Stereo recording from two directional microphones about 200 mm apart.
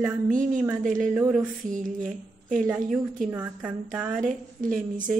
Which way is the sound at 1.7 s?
40° right (ahead or behind).